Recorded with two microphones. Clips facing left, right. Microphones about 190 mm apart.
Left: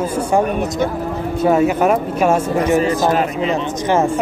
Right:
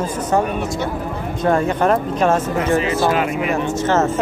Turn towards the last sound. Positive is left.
turn(degrees=15)  # may be behind; listen again after turning